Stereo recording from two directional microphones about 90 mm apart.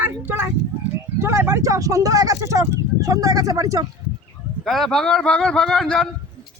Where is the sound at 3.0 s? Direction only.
40° right (ahead or behind).